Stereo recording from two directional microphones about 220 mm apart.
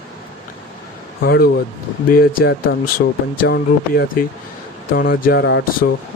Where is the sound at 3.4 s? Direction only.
45° left (ahead or behind).